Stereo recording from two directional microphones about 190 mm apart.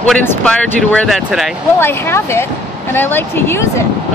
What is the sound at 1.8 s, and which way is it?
Speech, 15° left (ahead or behind).